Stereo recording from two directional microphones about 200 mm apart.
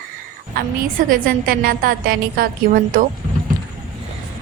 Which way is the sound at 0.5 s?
45° right (ahead or behind).